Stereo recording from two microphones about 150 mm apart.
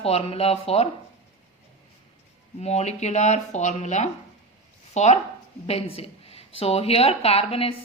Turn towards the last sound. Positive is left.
turn(degrees=40)  # may be behind; listen again after turning